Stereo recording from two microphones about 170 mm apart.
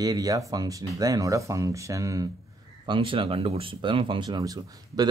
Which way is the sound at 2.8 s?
30° right (ahead or behind).